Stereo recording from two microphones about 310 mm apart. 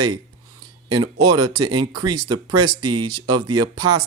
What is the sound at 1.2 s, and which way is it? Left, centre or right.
Speech, right.